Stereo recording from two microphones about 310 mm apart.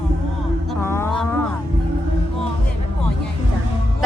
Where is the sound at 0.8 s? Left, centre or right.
Centre.